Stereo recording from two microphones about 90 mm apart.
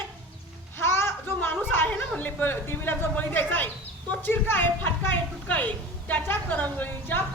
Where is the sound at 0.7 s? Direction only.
25° left (ahead or behind).